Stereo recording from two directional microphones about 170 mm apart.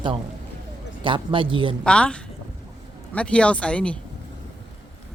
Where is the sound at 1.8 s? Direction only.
5° left (ahead or behind).